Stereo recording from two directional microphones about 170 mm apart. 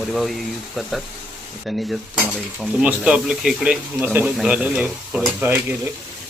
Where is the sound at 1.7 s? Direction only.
Centre (ahead or behind).